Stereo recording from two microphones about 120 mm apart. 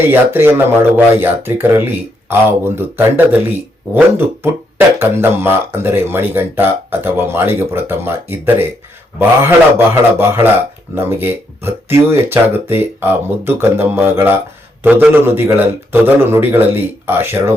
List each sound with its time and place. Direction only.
0.1 s speech: 20° right (ahead or behind)